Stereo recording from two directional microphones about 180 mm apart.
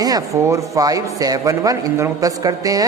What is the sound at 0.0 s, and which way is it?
A man's voice, 20° right (ahead or behind).